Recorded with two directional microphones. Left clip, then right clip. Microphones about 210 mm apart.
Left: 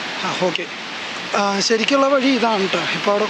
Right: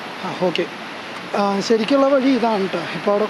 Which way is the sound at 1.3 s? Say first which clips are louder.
Even; 5° right (ahead or behind).